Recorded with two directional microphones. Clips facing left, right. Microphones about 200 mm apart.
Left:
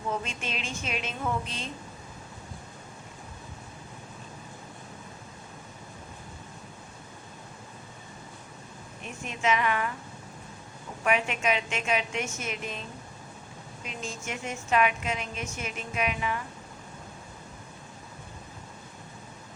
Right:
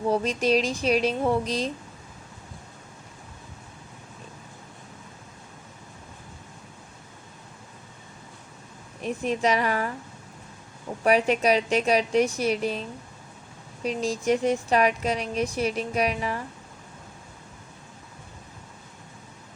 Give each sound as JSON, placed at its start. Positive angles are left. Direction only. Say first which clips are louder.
{"t": 0.1, "sound": "speech", "louder": "right 12 dB", "side_deg": -35}
{"t": 9.0, "sound": "speech", "louder": "right 11 dB", "side_deg": -35}
{"t": 11.0, "sound": "speech", "louder": "right 7 dB", "side_deg": -35}
{"t": 13.8, "sound": "speech", "louder": "right 13 dB", "side_deg": -35}